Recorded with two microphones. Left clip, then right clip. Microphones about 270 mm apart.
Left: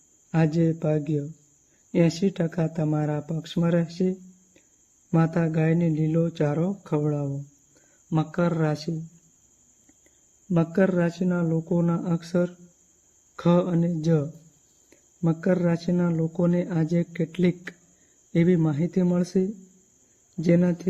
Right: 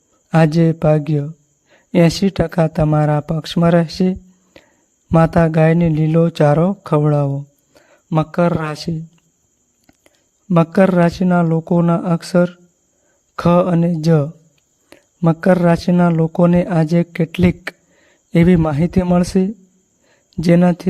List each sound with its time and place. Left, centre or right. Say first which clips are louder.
0.3 s speech: right 10 dB; right
10.5 s speech: right 10 dB; right